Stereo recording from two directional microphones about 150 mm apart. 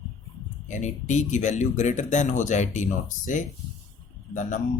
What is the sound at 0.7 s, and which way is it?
Speech, 55° left (ahead or behind).